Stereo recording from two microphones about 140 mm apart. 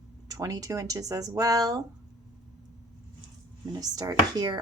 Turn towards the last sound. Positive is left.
turn(degrees=-30)  # may be behind; listen again after turning